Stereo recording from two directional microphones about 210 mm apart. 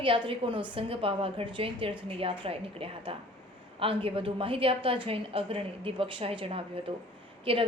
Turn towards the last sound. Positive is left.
turn(degrees=-25)  # may be behind; listen again after turning